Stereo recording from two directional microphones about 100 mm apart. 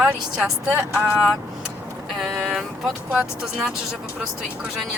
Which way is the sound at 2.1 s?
Centre (ahead or behind).